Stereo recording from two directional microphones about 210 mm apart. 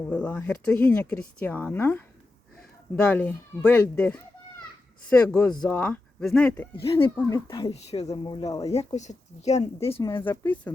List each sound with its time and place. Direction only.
0.1 s speech: 5° left (ahead or behind)
7.7 s speech: 30° left (ahead or behind)
8.6 s speech: 30° left (ahead or behind)
10.0 s speech: 15° left (ahead or behind)